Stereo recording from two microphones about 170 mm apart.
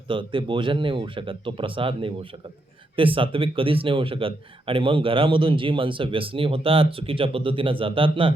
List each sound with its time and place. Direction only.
0.1 s speech: 30° right (ahead or behind)